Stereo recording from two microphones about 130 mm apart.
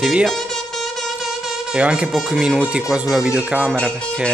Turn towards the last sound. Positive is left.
turn(degrees=5)  # may be behind; listen again after turning